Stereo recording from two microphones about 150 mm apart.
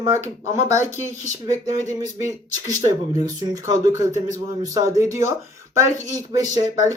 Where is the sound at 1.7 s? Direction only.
50° left (ahead or behind).